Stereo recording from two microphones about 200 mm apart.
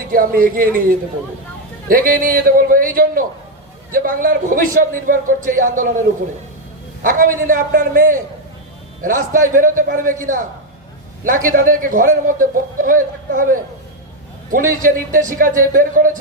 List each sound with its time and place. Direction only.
0.1 s a man's voice: 45° right (ahead or behind)
7.0 s a man's voice: 45° right (ahead or behind)
11.3 s a man's voice: 45° right (ahead or behind)